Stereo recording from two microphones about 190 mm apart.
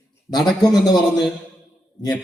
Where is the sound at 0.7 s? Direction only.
20° left (ahead or behind).